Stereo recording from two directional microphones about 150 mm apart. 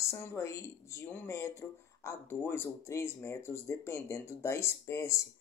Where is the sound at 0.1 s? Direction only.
15° left (ahead or behind).